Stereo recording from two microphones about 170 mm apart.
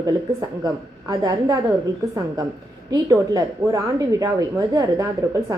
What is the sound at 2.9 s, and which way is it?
Speech, 20° right (ahead or behind).